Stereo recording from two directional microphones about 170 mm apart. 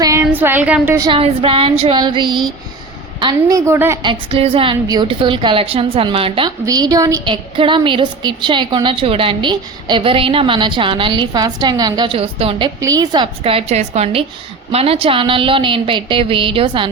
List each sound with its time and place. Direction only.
0.0 s a woman's voice: 15° right (ahead or behind)
1.0 s a woman's voice: 30° right (ahead or behind)
3.7 s a woman's voice: 15° right (ahead or behind)
4.0 s a woman's voice: 30° right (ahead or behind)
6.7 s a woman's voice: 20° right (ahead or behind)
12.8 s a woman's voice: 20° right (ahead or behind)
13.4 s a woman's voice: 35° right (ahead or behind)